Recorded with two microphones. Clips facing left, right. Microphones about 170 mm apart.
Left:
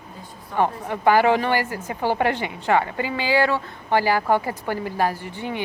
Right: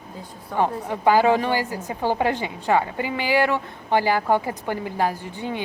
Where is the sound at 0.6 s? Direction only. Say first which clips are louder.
Even; 15° right (ahead or behind).